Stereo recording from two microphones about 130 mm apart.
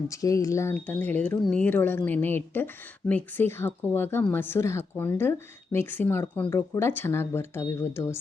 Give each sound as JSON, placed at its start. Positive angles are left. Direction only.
{"t": 0.2, "sound": "speech", "side_deg": 25}
{"t": 0.7, "sound": "speech", "side_deg": 10}